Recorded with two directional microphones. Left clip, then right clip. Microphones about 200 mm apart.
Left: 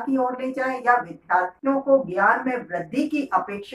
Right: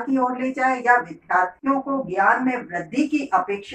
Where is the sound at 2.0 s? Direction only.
10° left (ahead or behind).